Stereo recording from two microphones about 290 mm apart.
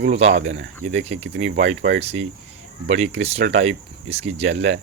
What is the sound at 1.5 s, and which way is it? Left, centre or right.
Speech, right.